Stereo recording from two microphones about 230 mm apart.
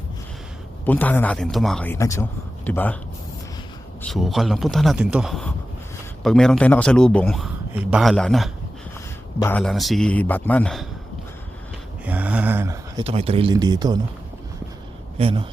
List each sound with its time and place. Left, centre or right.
0.9 s speech: centre
4.0 s a man's voice: centre
12.0 s a sound: centre
13.1 s speech: right
15.2 s speech: right